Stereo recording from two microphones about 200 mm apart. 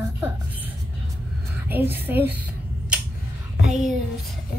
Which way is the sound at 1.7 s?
10° right (ahead or behind).